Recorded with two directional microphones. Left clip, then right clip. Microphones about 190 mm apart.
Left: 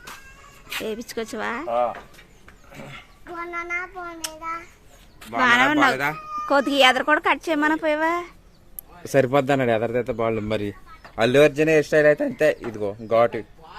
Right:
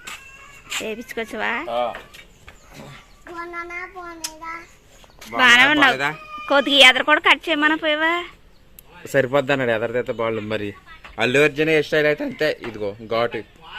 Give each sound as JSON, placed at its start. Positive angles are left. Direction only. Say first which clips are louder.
{"t": 0.9, "sound": "speech", "louder": "right 1 dB", "side_deg": 5}
{"t": 3.3, "sound": "speech", "louder": "left 2 dB", "side_deg": 0}
{"t": 9.1, "sound": "speech", "louder": "even", "side_deg": 45}